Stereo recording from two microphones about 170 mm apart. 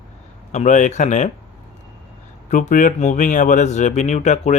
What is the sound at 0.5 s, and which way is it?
Speech, 45° left (ahead or behind).